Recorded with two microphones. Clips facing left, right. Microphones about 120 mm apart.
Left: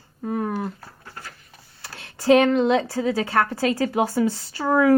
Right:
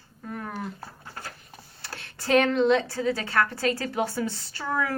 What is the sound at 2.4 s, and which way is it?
A woman's voice, 40° left (ahead or behind).